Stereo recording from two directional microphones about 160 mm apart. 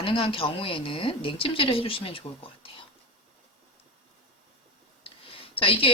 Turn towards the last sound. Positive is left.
turn(degrees=35)  # may be behind; listen again after turning